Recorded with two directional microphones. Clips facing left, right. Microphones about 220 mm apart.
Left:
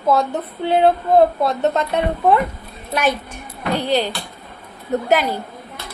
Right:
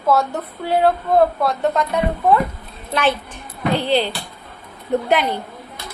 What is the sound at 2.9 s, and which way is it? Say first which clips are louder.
Speech: even; 10° left (ahead or behind).